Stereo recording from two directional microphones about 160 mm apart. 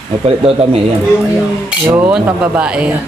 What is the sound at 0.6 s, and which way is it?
Speech, 40° right (ahead or behind).